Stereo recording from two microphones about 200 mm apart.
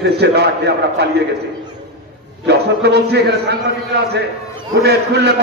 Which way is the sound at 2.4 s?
55° right (ahead or behind).